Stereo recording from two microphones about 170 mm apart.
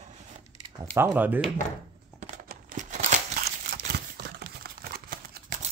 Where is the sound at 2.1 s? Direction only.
45° right (ahead or behind).